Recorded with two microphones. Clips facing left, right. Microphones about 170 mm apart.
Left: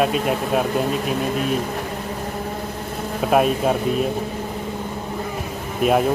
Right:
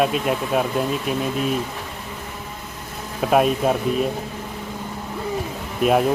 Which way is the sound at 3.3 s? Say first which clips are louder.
Even; centre (ahead or behind).